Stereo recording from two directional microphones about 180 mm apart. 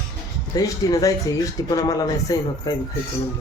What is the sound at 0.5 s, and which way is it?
Speech, 20° left (ahead or behind).